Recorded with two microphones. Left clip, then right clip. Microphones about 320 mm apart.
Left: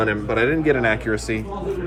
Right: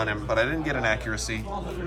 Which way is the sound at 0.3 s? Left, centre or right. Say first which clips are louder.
Left 6 dB; centre.